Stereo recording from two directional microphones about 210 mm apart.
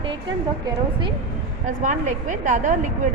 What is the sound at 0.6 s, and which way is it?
Speech, 25° right (ahead or behind).